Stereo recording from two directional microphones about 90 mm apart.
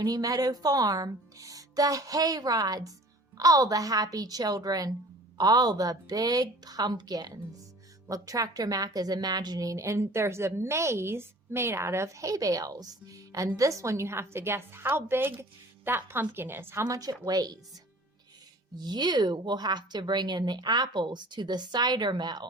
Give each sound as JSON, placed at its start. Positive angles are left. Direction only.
{"t": 0.0, "sound": "a woman's voice", "side_deg": -40}
{"t": 18.8, "sound": "speech", "side_deg": -55}